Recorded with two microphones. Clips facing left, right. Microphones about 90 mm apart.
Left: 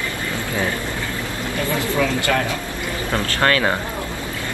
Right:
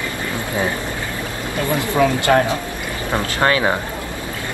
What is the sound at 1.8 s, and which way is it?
Speech, 20° right (ahead or behind).